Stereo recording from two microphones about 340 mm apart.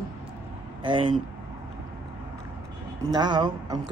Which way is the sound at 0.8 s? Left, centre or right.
Centre.